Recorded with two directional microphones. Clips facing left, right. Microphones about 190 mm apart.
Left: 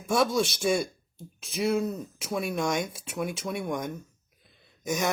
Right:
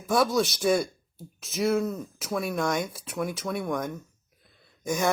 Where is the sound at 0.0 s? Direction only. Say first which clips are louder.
Right 1 dB; 25° left (ahead or behind).